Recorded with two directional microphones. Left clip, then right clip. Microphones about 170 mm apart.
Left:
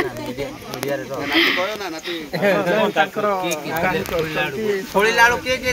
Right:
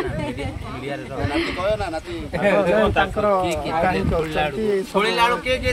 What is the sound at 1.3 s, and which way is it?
Speech, 5° left (ahead or behind).